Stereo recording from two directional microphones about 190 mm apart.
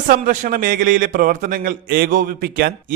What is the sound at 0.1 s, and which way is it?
A man's voice, 45° right (ahead or behind).